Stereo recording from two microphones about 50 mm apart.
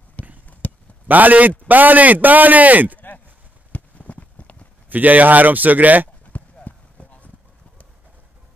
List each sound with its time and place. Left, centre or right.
0.5 s a sound: left
1.0 s a man's voice: right
3.7 s clip-clop: left
4.8 s a man's voice: right
6.3 s clip-clop: left